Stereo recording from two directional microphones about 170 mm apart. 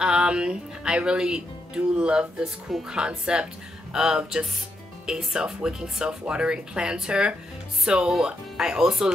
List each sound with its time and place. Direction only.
0.0 s speech: 5° right (ahead or behind)